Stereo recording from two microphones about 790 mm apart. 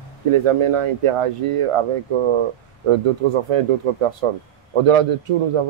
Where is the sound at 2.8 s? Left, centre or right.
Right.